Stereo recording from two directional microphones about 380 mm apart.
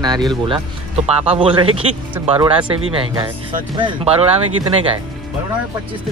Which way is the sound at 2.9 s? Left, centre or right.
Centre.